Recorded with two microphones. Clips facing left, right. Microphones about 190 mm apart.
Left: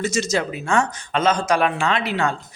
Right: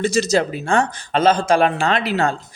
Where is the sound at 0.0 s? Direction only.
35° right (ahead or behind).